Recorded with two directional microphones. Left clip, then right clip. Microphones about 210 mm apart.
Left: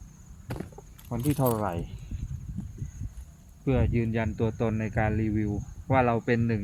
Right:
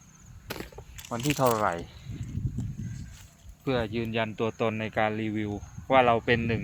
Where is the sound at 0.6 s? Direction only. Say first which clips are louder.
Right 2 dB; 25° right (ahead or behind).